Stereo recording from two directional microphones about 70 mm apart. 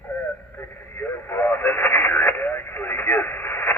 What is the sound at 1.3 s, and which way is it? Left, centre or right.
Radio, left.